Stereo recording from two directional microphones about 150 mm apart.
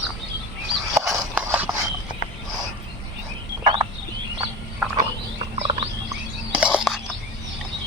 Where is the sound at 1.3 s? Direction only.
10° right (ahead or behind).